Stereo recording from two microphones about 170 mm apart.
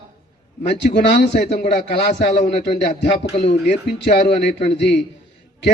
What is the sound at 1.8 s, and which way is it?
Speech, 90° left.